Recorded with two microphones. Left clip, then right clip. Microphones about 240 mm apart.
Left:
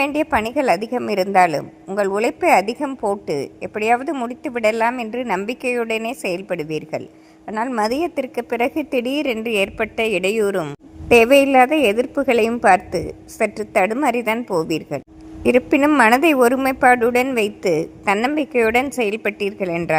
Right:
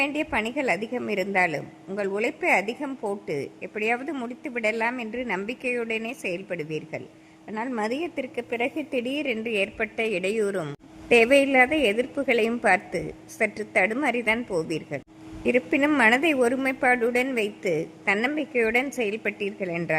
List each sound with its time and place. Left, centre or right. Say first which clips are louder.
0.0 s a woman's voice: left 7 dB; centre